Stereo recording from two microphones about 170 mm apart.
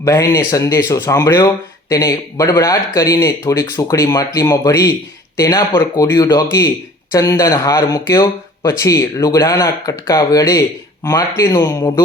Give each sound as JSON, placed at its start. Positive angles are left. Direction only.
{"t": 0.0, "sound": "speech", "side_deg": 20}